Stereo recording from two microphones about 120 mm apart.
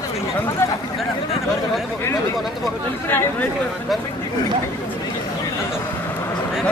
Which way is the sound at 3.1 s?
15° left (ahead or behind).